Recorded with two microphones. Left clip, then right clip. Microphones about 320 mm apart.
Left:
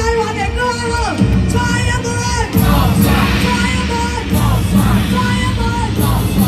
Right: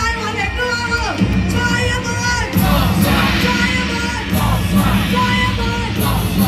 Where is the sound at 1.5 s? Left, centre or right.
Centre.